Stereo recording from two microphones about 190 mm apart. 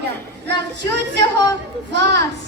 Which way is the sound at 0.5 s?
65° right (ahead or behind).